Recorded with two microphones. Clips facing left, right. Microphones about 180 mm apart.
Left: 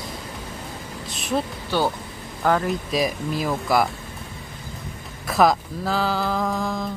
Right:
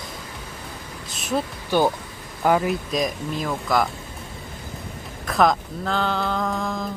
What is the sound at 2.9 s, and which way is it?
Speech, 5° left (ahead or behind).